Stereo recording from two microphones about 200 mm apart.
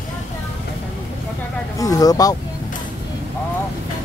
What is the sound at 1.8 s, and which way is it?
Speech, 15° left (ahead or behind).